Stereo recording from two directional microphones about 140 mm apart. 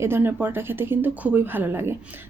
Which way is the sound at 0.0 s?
15° right (ahead or behind).